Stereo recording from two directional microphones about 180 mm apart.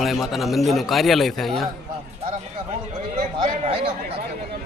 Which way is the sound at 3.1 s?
40° right (ahead or behind).